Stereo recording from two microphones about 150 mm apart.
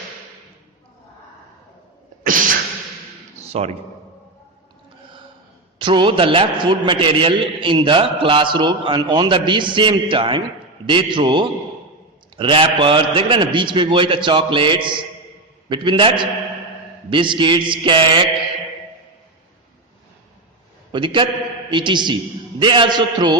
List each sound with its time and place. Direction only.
2.2 s a sound: 65° right (ahead or behind)
3.4 s a man's voice: 45° right (ahead or behind)
5.8 s a man's voice: 30° right (ahead or behind)
20.9 s a man's voice: 35° right (ahead or behind)